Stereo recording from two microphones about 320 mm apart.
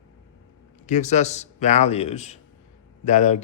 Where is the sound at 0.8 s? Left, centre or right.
Left.